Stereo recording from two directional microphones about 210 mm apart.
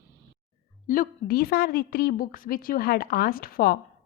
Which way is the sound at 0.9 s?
40° left (ahead or behind).